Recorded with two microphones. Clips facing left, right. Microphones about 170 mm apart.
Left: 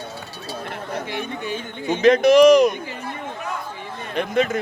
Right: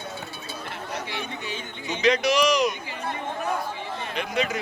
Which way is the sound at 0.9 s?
50° left (ahead or behind).